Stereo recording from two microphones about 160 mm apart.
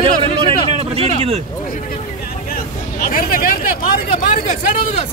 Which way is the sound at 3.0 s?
65° left (ahead or behind).